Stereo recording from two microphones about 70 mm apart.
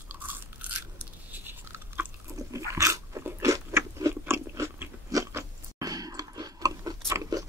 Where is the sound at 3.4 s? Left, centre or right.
Right.